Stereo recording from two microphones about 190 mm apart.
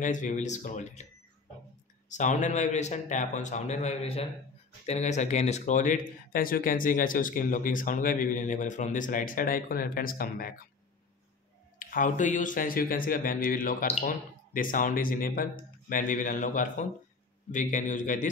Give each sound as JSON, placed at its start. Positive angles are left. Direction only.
{"t": 0.0, "sound": "a man's voice", "side_deg": 40}
{"t": 2.0, "sound": "a man's voice", "side_deg": 40}
{"t": 11.8, "sound": "a man's voice", "side_deg": 45}